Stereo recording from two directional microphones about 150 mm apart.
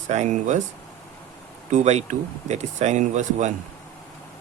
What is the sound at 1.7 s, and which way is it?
Speech, 50° right (ahead or behind).